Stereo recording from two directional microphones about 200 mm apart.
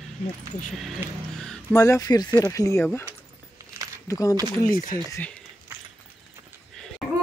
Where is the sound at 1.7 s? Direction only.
15° left (ahead or behind).